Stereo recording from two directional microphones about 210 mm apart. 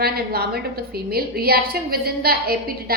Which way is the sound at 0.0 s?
45° right (ahead or behind).